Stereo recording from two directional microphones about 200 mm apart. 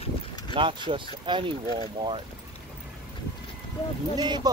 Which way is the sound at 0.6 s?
25° right (ahead or behind).